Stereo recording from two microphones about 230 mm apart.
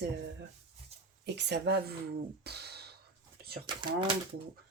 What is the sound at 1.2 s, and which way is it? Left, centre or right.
Speech, right.